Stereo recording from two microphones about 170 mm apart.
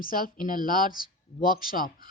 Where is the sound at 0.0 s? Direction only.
55° left (ahead or behind).